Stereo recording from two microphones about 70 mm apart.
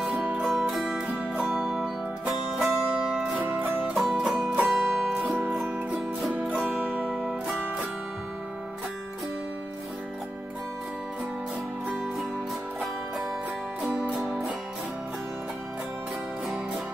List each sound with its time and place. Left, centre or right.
0.4 s music: centre
5.2 s music: right
6.5 s music: centre
7.2 s music: centre
13.7 s music: centre